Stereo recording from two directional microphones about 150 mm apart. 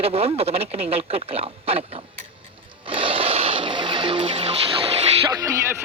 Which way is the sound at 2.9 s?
35° right (ahead or behind).